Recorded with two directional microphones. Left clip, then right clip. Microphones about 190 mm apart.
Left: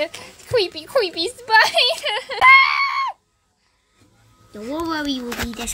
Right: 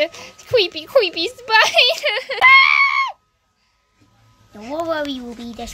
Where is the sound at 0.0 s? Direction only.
20° right (ahead or behind).